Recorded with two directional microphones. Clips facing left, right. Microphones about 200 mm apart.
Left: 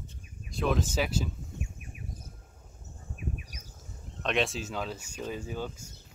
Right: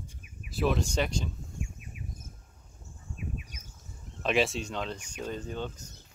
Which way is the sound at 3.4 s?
35° left (ahead or behind).